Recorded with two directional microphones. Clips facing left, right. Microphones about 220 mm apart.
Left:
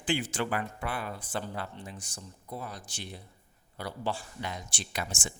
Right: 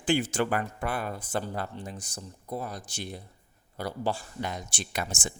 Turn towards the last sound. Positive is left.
turn(degrees=-40)  # may be behind; listen again after turning